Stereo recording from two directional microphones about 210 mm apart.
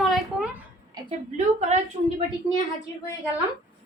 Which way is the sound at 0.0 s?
Centre (ahead or behind).